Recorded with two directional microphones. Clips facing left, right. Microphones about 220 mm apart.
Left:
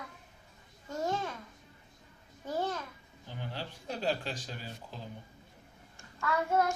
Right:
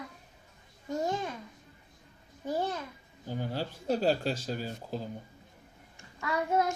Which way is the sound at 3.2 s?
40° right (ahead or behind).